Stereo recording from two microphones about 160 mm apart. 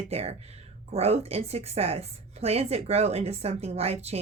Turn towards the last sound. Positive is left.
turn(degrees=-40)  # may be behind; listen again after turning